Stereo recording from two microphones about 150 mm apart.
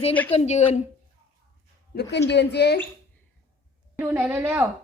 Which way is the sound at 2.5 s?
90° left.